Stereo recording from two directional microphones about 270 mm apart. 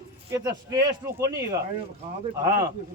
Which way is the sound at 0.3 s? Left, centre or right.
Centre.